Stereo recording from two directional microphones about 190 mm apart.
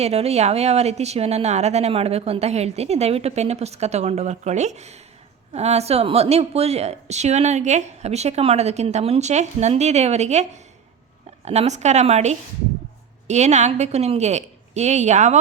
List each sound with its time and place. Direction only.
0.0 s a woman's voice: 35° right (ahead or behind)